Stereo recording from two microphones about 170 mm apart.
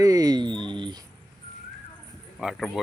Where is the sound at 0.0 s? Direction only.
20° right (ahead or behind).